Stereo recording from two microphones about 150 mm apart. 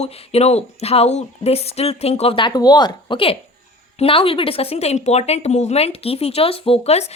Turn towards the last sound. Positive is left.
turn(degrees=40)  # may be behind; listen again after turning